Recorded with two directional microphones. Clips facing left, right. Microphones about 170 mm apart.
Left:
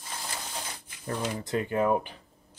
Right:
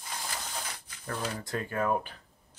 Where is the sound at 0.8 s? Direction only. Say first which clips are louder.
Left 4 dB; 20° left (ahead or behind).